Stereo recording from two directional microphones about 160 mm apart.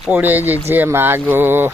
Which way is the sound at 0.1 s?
10° right (ahead or behind).